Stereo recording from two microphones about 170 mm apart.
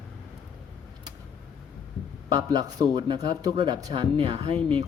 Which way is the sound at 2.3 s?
25° right (ahead or behind).